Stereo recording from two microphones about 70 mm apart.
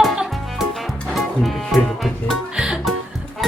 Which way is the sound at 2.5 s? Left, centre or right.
Centre.